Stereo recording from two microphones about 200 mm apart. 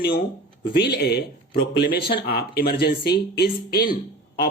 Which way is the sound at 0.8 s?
55° left (ahead or behind).